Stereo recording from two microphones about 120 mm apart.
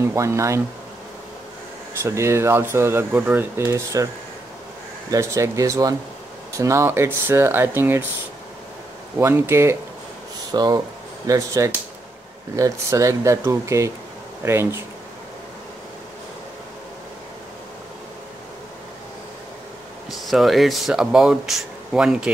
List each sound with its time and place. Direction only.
0.0 s speech: 25° right (ahead or behind)
2.0 s speech: 25° right (ahead or behind)
3.6 s speech: 25° right (ahead or behind)
5.1 s speech: 25° right (ahead or behind)
9.2 s speech: 20° right (ahead or behind)
10.5 s speech: 35° right (ahead or behind)
20.1 s speech: centre (ahead or behind)